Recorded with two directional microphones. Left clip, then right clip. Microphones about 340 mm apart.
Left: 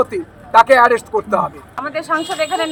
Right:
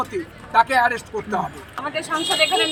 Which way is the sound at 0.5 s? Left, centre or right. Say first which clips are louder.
Left 7 dB; centre.